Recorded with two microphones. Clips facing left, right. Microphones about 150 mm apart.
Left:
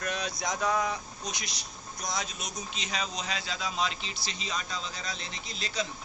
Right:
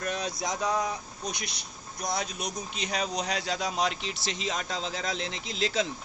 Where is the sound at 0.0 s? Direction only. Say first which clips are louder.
Right 2 dB; 30° right (ahead or behind).